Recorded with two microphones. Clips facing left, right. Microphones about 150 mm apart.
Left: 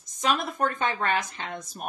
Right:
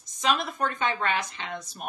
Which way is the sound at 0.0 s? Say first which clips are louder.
Even; 50° left (ahead or behind).